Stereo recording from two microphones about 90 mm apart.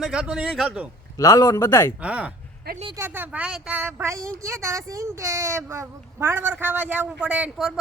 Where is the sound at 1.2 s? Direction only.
40° left (ahead or behind).